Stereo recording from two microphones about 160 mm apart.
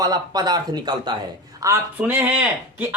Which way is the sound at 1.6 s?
15° right (ahead or behind).